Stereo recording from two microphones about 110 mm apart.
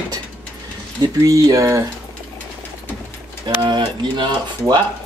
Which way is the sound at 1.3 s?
30° right (ahead or behind).